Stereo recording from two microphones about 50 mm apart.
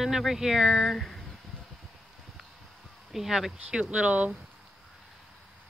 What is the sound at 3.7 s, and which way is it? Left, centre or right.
Speech, centre.